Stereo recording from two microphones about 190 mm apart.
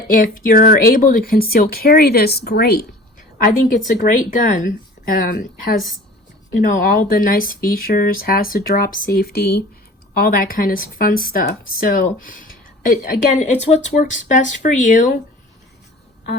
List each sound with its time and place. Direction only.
0.1 s a woman's voice: 45° left (ahead or behind)